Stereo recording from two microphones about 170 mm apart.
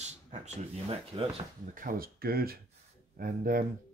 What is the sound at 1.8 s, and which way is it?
Speech, 55° right (ahead or behind).